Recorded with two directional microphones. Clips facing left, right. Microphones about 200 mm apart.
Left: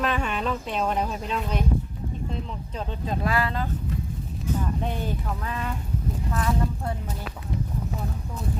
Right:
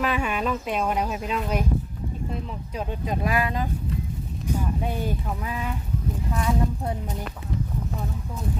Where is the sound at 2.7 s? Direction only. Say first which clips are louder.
Right 2 dB; 10° right (ahead or behind).